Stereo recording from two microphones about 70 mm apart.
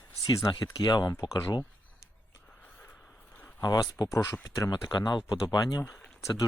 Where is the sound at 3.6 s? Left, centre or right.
Left.